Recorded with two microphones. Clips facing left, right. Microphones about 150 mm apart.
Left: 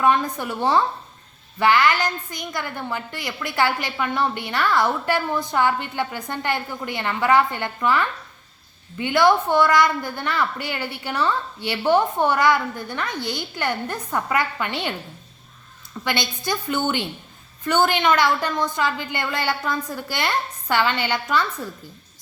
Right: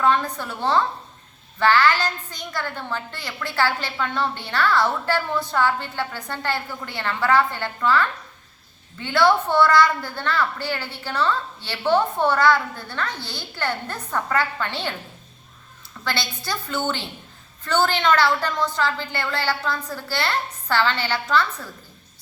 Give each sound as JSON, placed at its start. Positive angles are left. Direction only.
{"t": 0.0, "sound": "a woman's voice", "side_deg": 15}
{"t": 16.0, "sound": "a woman's voice", "side_deg": 15}